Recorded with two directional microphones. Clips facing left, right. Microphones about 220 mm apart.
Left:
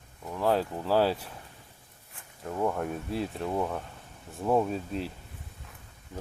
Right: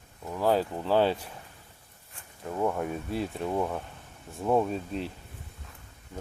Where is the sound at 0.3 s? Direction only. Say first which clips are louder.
Right 1 dB; centre (ahead or behind).